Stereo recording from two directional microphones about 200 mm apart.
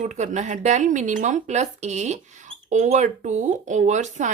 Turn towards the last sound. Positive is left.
turn(degrees=-35)  # may be behind; listen again after turning